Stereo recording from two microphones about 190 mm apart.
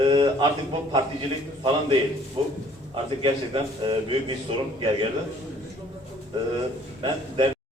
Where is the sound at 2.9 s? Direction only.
25° right (ahead or behind).